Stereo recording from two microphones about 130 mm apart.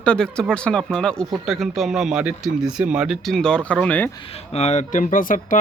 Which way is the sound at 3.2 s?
5° left (ahead or behind).